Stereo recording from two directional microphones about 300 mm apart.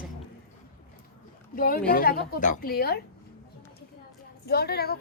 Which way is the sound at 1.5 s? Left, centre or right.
Left.